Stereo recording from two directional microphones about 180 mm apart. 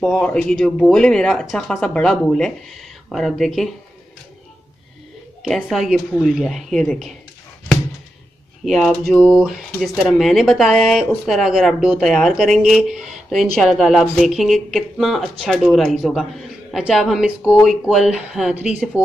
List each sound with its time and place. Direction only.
0.0 s speech: 5° left (ahead or behind)
5.4 s speech: centre (ahead or behind)
8.6 s speech: centre (ahead or behind)